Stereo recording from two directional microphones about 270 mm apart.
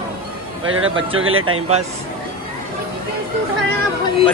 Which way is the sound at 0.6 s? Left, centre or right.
Right.